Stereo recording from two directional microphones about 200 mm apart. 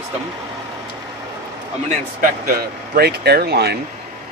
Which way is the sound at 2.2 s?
45° right (ahead or behind).